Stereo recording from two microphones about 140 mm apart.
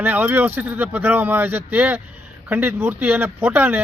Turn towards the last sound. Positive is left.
turn(degrees=-15)  # may be behind; listen again after turning